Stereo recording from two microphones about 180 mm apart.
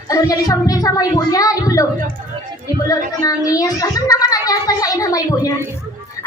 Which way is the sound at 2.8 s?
20° left (ahead or behind).